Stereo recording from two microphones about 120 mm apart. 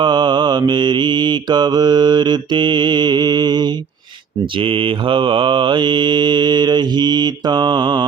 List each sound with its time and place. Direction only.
0.0 s mantra: 40° right (ahead or behind)
4.5 s mantra: 45° right (ahead or behind)